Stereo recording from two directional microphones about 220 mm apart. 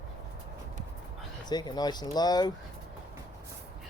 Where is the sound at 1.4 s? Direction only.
20° left (ahead or behind).